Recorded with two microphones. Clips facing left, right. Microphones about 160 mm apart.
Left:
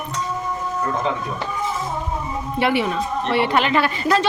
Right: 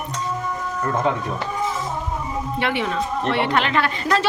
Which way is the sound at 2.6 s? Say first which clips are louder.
Left 4 dB; 10° left (ahead or behind).